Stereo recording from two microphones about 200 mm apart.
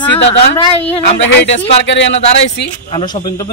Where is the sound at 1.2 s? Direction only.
65° left (ahead or behind).